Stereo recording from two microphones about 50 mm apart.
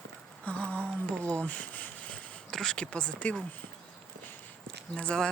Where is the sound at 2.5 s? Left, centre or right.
Centre.